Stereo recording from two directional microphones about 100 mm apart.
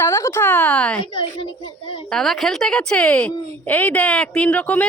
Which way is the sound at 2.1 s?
Centre (ahead or behind).